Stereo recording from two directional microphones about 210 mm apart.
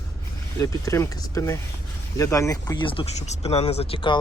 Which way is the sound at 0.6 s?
15° left (ahead or behind).